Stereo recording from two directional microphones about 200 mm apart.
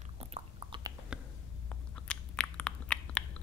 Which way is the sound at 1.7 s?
5° left (ahead or behind).